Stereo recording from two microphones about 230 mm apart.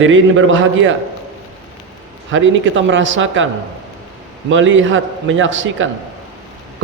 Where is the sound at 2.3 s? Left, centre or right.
Right.